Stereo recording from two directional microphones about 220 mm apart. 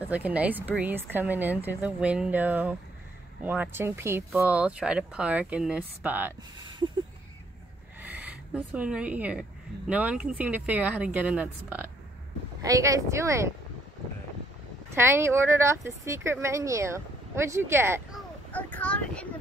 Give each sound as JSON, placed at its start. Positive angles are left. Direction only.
{"t": 0.0, "sound": "speech", "side_deg": -5}
{"t": 6.6, "sound": "a sound", "side_deg": -20}
{"t": 8.0, "sound": "rub", "side_deg": -5}
{"t": 9.8, "sound": "speech", "side_deg": -5}
{"t": 15.0, "sound": "speech", "side_deg": -10}
{"t": 18.1, "sound": "speech", "side_deg": 5}